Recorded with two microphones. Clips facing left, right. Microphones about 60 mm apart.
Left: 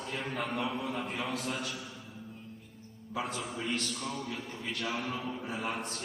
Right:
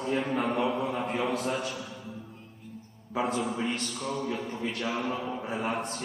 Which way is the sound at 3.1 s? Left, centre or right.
Right.